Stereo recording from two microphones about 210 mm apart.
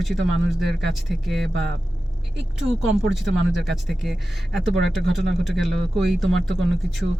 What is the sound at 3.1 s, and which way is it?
Speech, 60° right (ahead or behind).